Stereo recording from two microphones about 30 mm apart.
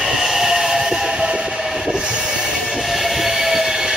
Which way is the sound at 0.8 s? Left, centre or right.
Right.